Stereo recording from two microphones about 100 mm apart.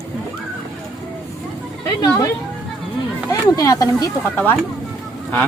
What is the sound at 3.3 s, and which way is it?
Speech, 35° left (ahead or behind).